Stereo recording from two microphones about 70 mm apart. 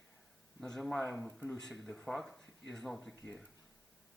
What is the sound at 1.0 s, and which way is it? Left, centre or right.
Speech, left.